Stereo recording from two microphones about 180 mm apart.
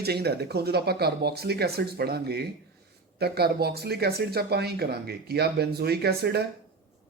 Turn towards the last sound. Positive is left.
turn(degrees=-65)  # may be behind; listen again after turning